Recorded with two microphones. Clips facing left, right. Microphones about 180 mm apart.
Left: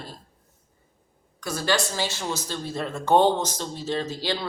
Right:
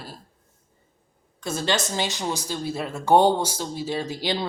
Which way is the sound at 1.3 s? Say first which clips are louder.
Even; 25° right (ahead or behind).